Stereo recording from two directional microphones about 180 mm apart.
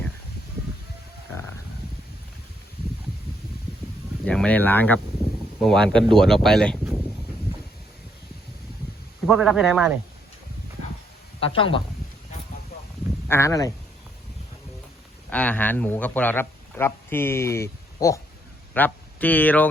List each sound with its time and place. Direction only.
0.6 s a sound: 15° right (ahead or behind)
4.3 s a man's voice: 5° left (ahead or behind)
9.2 s a man's voice: centre (ahead or behind)
11.3 s speech: 30° left (ahead or behind)
13.2 s speech: 15° left (ahead or behind)
15.3 s speech: 10° left (ahead or behind)